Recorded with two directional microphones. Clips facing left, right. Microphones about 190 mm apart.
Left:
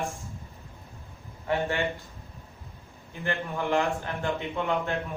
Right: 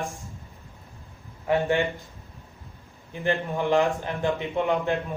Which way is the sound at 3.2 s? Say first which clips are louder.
Right 5 dB; 15° right (ahead or behind).